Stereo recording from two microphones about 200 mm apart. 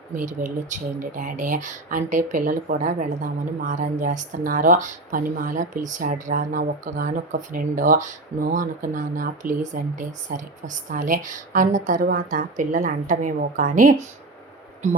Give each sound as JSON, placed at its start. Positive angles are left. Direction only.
{"t": 0.1, "sound": "speech", "side_deg": -40}